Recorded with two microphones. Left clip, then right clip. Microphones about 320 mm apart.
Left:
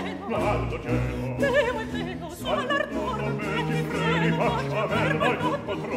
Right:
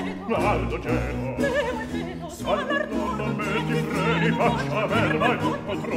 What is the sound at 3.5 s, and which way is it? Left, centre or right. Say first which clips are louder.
Music: right 2 dB; right.